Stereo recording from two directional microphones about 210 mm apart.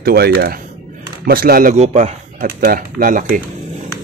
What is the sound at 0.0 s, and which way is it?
A man's voice, 45° right (ahead or behind).